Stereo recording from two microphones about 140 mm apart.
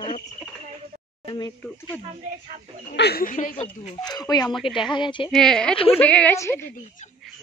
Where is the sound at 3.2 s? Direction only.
75° left (ahead or behind).